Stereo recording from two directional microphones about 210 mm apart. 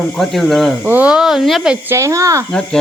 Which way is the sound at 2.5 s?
5° left (ahead or behind).